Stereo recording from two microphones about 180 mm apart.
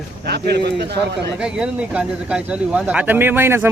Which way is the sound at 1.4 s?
5° right (ahead or behind).